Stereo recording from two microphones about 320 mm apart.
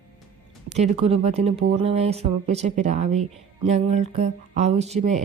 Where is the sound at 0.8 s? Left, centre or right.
Centre.